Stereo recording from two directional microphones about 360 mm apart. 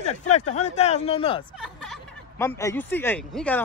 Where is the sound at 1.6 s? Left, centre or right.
Centre.